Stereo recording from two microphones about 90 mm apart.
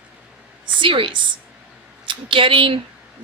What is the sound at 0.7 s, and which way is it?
Speech, 70° right (ahead or behind).